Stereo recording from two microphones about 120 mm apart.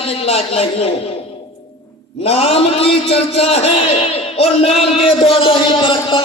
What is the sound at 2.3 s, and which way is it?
A man's voice, 55° left (ahead or behind).